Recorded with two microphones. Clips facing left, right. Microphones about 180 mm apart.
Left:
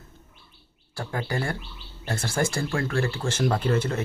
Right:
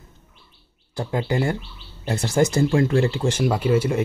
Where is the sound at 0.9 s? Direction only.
20° right (ahead or behind).